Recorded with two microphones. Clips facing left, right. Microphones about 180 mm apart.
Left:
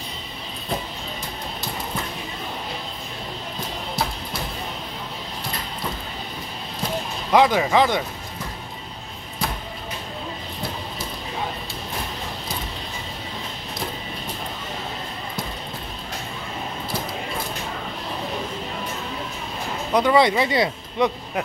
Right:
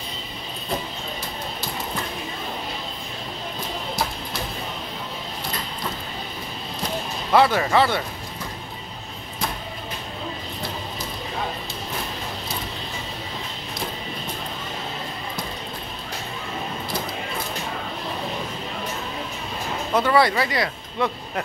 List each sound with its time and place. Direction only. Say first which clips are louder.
7.3 s speech: left 1 dB; 15° left (ahead or behind)
19.9 s speech: left 2 dB; 15° left (ahead or behind)